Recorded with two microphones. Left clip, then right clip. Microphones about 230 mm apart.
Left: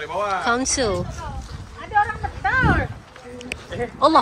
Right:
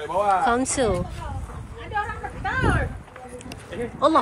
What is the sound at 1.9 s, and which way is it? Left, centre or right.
Vehicle, left.